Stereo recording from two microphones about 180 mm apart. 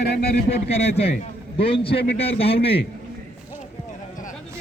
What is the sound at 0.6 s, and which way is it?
A man's voice, 35° left (ahead or behind).